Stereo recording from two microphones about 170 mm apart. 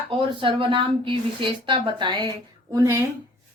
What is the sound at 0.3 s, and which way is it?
A woman's voice, 30° right (ahead or behind).